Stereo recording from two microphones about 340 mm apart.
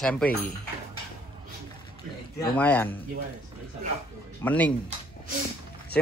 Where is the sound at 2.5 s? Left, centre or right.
Centre.